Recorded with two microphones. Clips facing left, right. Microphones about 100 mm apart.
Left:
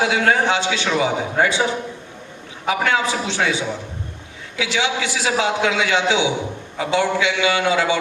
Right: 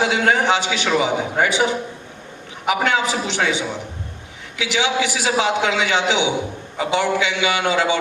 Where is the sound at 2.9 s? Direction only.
20° right (ahead or behind).